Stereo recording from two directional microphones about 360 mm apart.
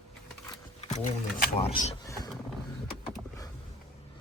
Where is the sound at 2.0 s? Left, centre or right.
Centre.